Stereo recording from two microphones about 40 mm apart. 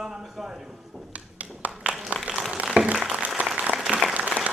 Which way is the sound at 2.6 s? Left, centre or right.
Right.